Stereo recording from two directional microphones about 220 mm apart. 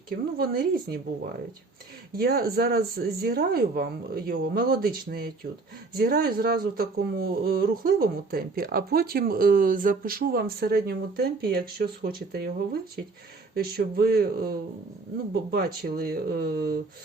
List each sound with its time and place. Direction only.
0.3 s speech: 40° right (ahead or behind)